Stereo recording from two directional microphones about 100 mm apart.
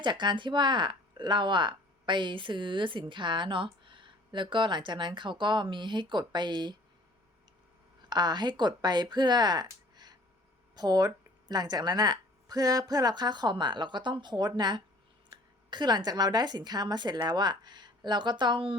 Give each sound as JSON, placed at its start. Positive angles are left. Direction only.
{"t": 0.0, "sound": "speech", "side_deg": -50}
{"t": 8.1, "sound": "a woman's voice", "side_deg": -45}